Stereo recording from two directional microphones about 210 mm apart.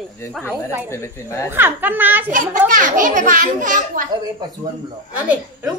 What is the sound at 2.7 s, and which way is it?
A woman's voice, 40° right (ahead or behind).